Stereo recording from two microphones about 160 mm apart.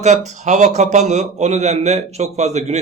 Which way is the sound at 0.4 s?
45° right (ahead or behind).